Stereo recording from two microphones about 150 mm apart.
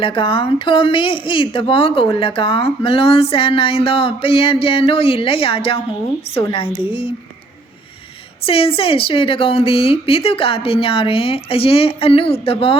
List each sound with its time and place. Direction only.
0.0 s a woman's voice: 35° left (ahead or behind)
8.4 s a woman's voice: 40° left (ahead or behind)